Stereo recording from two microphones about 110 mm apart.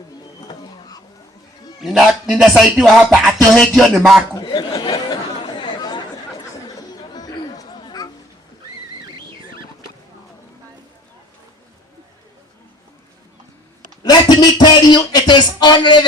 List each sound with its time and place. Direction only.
0.4 s a sound: 35° left (ahead or behind)
1.8 s music: 5° right (ahead or behind)
4.4 s chatter: 40° left (ahead or behind)
7.0 s music: 35° left (ahead or behind)
14.0 s music: 40° left (ahead or behind)